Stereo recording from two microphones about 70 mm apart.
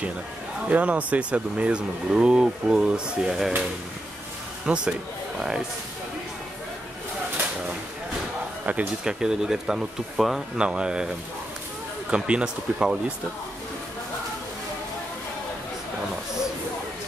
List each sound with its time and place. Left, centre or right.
0.7 s speech: centre
4.6 s speech: centre
8.6 s speech: right
9.2 s speech: centre
12.1 s speech: centre